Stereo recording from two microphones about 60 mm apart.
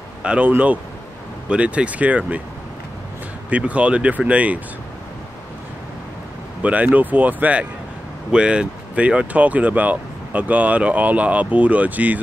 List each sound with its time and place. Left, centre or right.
0.2 s speech: centre
3.4 s speech: right
6.6 s speech: right